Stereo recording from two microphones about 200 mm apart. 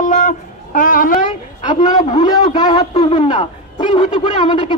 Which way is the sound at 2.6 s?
25° left (ahead or behind).